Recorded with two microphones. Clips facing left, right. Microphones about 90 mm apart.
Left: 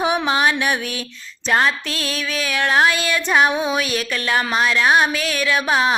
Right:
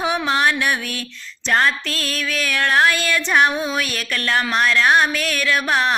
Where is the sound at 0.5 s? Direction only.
20° left (ahead or behind).